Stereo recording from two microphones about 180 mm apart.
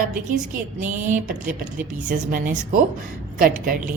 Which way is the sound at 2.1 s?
50° right (ahead or behind).